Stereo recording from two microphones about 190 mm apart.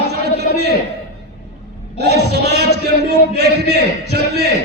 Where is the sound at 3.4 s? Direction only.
60° right (ahead or behind).